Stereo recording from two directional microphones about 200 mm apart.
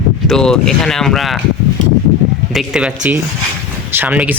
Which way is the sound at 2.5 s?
Centre (ahead or behind).